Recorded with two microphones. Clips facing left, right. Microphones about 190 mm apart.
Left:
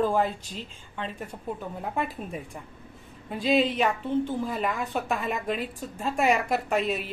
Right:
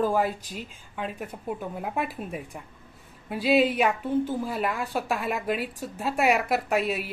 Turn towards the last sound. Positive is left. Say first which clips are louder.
# right 1 dB
turn(degrees=-5)  # may be behind; listen again after turning